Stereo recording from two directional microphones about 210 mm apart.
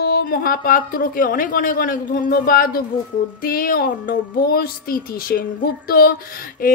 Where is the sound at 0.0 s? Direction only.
45° left (ahead or behind).